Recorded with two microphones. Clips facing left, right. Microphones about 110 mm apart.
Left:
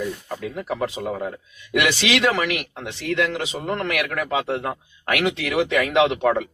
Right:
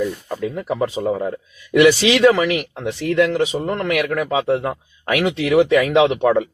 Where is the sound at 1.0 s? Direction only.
20° right (ahead or behind).